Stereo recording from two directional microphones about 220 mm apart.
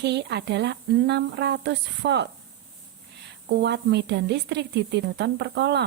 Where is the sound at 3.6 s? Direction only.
50° right (ahead or behind).